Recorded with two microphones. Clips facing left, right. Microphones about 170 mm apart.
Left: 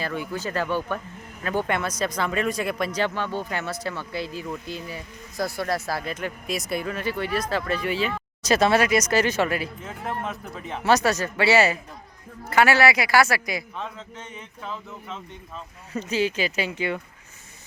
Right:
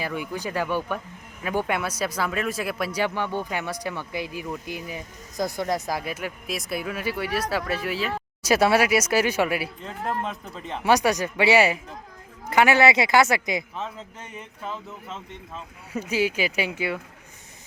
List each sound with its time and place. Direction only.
0.0 s speech: 15° right (ahead or behind)
9.8 s speech: centre (ahead or behind)
10.8 s speech: 15° right (ahead or behind)
13.7 s speech: 5° right (ahead or behind)
15.9 s speech: 10° right (ahead or behind)